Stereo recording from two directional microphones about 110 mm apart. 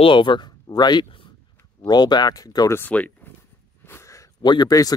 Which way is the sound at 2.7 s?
15° left (ahead or behind).